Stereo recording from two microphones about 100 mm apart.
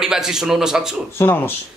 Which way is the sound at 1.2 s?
25° left (ahead or behind).